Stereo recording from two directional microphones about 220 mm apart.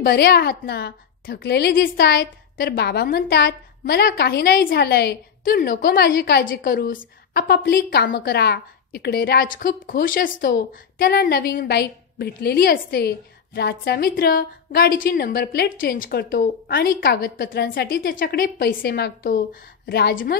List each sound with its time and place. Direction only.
0.0 s a woman's voice: 45° left (ahead or behind)